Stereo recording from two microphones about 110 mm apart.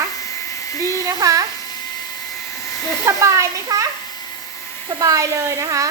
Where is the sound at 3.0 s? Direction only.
30° right (ahead or behind).